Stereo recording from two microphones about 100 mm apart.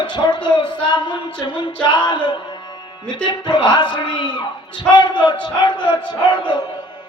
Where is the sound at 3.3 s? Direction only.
50° left (ahead or behind).